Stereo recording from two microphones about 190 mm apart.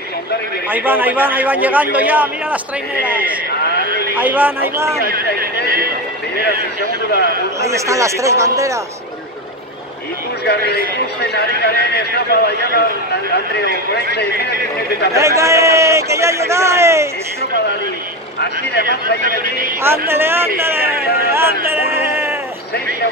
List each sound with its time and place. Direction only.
0.7 s a man's voice: 10° right (ahead or behind)
5.0 s a man's voice: 50° right (ahead or behind)
7.6 s a man's voice: 15° right (ahead or behind)
10.4 s speech: 60° left (ahead or behind)
15.1 s a man's voice: 15° right (ahead or behind)
18.4 s speech: 60° left (ahead or behind)
19.2 s a man's voice: 45° right (ahead or behind)
19.8 s a man's voice: 10° right (ahead or behind)